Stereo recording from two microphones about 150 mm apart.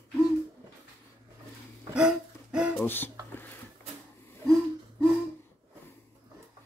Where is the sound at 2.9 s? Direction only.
15° left (ahead or behind).